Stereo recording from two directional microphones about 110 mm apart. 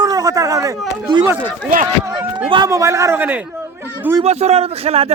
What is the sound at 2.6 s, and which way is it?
Speech, 25° right (ahead or behind).